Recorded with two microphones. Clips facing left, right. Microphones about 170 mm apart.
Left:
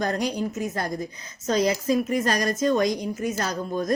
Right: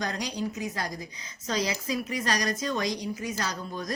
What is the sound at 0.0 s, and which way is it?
A woman's voice, 50° left (ahead or behind).